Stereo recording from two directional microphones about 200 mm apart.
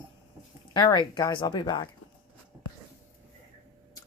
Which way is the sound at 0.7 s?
20° left (ahead or behind).